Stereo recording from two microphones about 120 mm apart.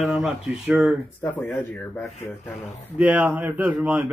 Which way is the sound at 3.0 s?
15° right (ahead or behind).